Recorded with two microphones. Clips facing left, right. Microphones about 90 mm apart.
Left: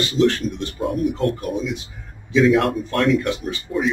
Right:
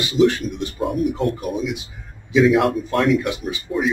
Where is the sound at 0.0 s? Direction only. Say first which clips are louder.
Right 1 dB; 10° right (ahead or behind).